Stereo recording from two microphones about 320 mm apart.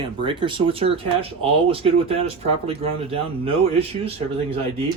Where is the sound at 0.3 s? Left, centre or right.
Centre.